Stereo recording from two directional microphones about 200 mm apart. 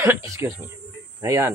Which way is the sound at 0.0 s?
15° right (ahead or behind).